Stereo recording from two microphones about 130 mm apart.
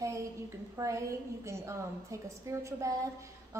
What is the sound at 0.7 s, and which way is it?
A woman's voice, 25° right (ahead or behind).